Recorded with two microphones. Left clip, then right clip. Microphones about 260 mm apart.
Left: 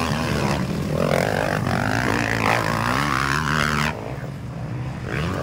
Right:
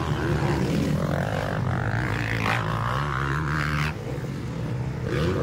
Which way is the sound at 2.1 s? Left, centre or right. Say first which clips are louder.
Left 6 dB; left.